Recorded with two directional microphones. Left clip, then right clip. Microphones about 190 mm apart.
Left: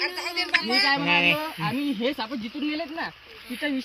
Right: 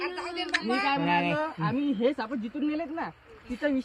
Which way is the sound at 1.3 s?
5° left (ahead or behind).